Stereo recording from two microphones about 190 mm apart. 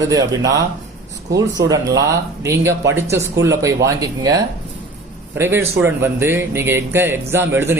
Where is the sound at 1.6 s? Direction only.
20° right (ahead or behind).